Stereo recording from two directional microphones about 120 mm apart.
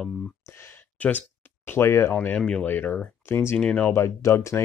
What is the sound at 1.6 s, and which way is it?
Speech, 20° left (ahead or behind).